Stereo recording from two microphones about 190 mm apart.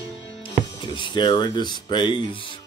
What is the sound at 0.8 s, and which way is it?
Speech, 25° left (ahead or behind).